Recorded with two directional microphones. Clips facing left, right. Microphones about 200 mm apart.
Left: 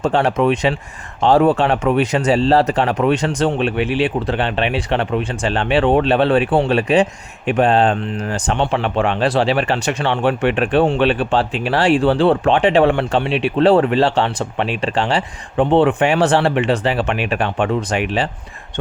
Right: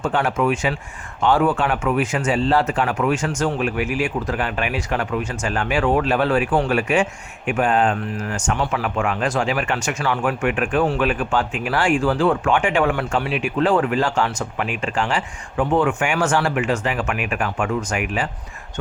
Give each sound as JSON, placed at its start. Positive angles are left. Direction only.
{"t": 0.0, "sound": "speech", "side_deg": 35}